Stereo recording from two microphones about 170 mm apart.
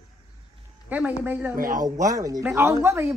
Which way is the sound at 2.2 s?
15° right (ahead or behind).